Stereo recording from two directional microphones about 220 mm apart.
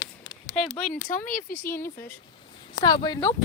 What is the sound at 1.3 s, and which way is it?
Speech, 10° left (ahead or behind).